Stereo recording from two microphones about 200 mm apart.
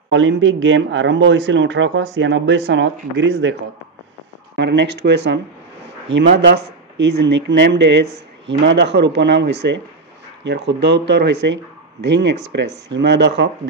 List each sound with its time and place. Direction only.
0.1 s speech: 65° right (ahead or behind)
4.6 s speech: 60° right (ahead or behind)
6.4 s speech: 60° right (ahead or behind)